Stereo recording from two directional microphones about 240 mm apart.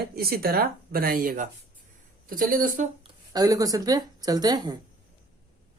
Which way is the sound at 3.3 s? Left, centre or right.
Centre.